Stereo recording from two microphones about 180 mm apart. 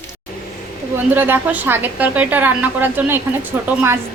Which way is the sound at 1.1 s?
10° right (ahead or behind).